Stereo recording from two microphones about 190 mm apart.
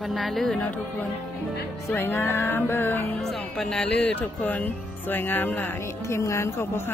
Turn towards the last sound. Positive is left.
turn(degrees=15)  # may be behind; listen again after turning